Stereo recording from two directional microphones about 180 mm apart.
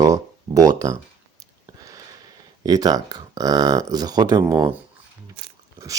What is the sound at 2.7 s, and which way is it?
Speech, 20° right (ahead or behind).